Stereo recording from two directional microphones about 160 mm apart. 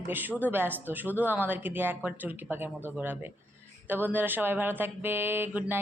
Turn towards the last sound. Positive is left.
turn(degrees=-10)  # may be behind; listen again after turning